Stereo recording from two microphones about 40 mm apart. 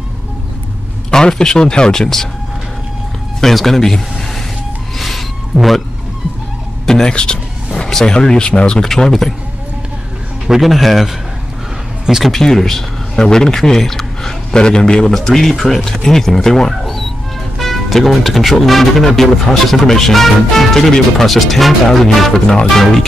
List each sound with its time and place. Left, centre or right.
1.1 s speech: centre
3.3 s speech: centre
4.9 s a sound: centre
7.1 s speech: left
8.8 s speech: centre
10.4 s speech: centre
12.3 s speech: centre
14.5 s speech: centre
15.1 s speech: centre
22.3 s speech: centre